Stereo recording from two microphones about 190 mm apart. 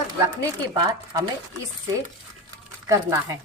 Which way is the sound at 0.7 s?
20° right (ahead or behind).